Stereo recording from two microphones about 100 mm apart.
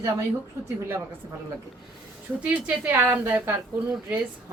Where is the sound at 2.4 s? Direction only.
15° right (ahead or behind).